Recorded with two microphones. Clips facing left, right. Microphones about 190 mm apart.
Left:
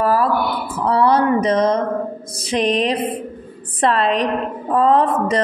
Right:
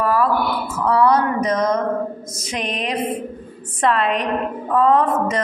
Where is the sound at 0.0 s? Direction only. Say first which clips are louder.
Left 1 dB; 35° left (ahead or behind).